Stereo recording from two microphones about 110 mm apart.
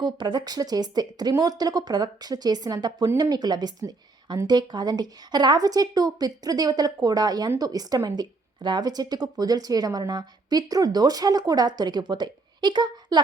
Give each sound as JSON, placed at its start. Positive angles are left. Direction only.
{"t": 0.0, "sound": "a woman's voice", "side_deg": -45}